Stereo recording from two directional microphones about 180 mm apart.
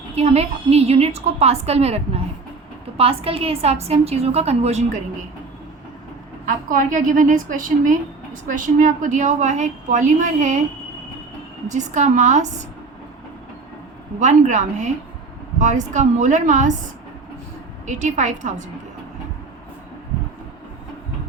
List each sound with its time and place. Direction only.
0.2 s a woman's voice: 35° right (ahead or behind)
6.4 s a woman's voice: 50° right (ahead or behind)
11.7 s a woman's voice: 40° right (ahead or behind)
14.2 s a woman's voice: 40° right (ahead or behind)
17.8 s a woman's voice: 40° right (ahead or behind)